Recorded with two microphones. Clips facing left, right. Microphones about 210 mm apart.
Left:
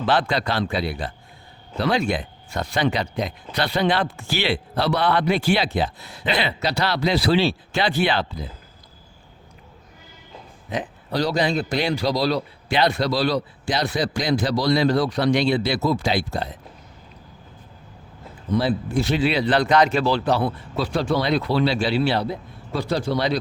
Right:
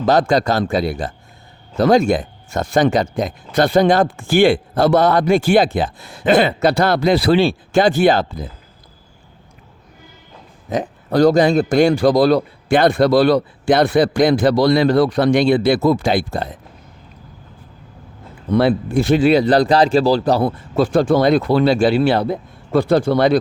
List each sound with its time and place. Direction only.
0.0 s speech: 45° right (ahead or behind)
10.7 s speech: 45° right (ahead or behind)
18.5 s speech: 60° right (ahead or behind)